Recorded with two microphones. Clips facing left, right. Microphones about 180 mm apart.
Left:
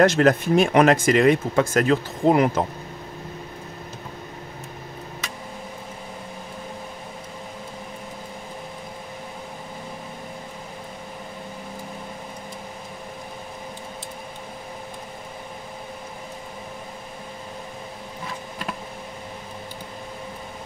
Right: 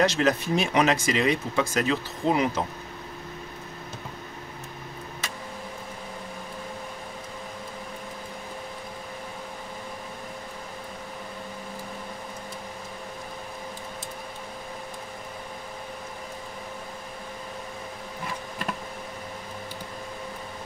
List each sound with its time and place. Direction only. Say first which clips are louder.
0.0 s speech: left 6 dB; 50° left (ahead or behind)